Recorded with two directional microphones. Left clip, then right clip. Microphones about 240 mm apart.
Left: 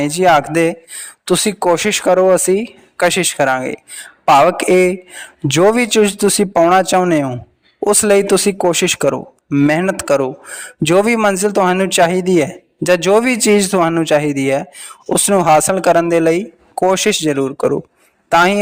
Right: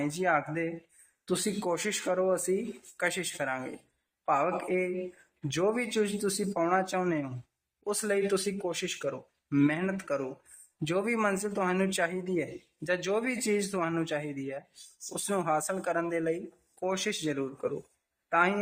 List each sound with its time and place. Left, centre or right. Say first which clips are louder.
0.0 s speech: left 17 dB; left